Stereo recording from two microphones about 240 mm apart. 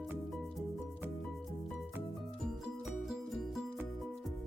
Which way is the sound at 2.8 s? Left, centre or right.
Centre.